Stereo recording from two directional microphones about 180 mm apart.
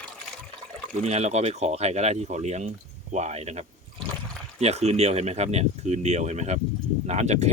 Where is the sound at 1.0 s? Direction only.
35° right (ahead or behind).